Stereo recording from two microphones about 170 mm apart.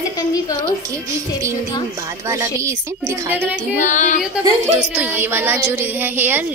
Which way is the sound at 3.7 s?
45° left (ahead or behind).